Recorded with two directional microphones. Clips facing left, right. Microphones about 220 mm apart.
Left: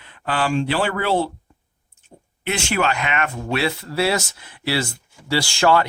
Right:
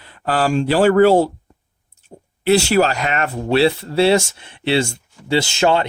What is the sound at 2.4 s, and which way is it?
Speech, 35° right (ahead or behind).